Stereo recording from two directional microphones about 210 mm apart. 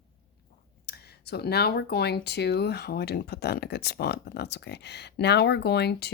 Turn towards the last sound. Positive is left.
turn(degrees=50)  # may be behind; listen again after turning